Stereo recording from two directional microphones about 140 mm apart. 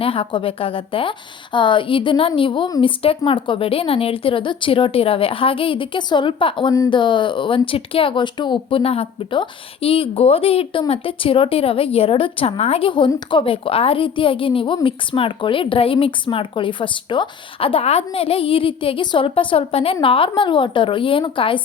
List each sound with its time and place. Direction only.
0.0 s speech: 40° left (ahead or behind)